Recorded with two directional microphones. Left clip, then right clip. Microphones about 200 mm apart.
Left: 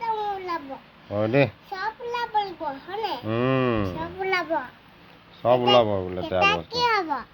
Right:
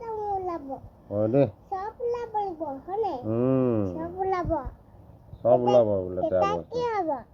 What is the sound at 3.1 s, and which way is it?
Speech, 15° right (ahead or behind).